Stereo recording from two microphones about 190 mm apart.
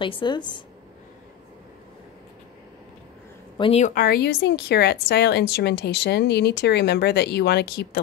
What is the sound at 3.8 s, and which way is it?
A woman's voice, 45° left (ahead or behind).